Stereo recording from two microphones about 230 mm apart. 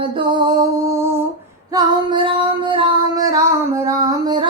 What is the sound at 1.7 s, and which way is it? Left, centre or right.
Female singing, right.